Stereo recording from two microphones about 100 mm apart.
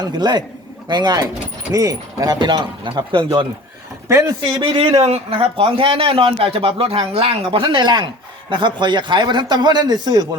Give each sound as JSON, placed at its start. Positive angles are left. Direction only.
{"t": 0.0, "sound": "a man's voice", "side_deg": -45}
{"t": 4.1, "sound": "speech", "side_deg": -30}
{"t": 4.5, "sound": "a man's voice", "side_deg": -60}